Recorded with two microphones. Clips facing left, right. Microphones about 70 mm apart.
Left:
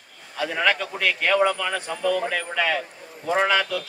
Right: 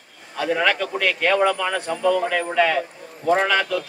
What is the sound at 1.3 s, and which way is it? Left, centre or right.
Speech, right.